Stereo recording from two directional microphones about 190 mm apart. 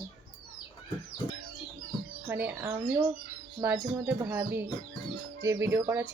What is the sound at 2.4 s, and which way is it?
Speech, 10° right (ahead or behind).